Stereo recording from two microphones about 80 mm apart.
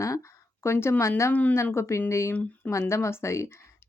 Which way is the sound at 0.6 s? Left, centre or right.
Left.